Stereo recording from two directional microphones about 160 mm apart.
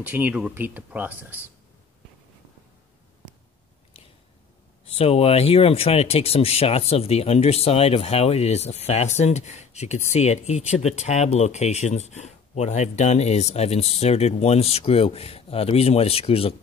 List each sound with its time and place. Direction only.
0.0 s speech: 10° right (ahead or behind)
4.9 s speech: 40° left (ahead or behind)